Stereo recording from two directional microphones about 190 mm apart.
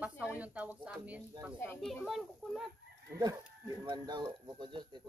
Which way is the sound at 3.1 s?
20° right (ahead or behind).